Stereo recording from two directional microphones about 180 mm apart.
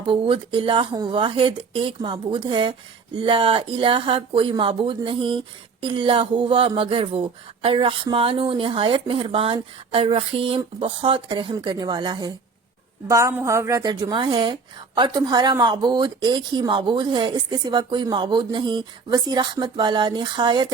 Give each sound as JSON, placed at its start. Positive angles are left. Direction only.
{"t": 0.0, "sound": "a woman's voice", "side_deg": -30}